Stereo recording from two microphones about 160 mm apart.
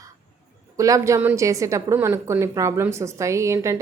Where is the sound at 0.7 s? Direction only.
20° right (ahead or behind).